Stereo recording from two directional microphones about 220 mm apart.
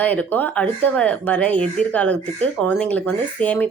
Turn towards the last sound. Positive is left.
turn(degrees=5)  # may be behind; listen again after turning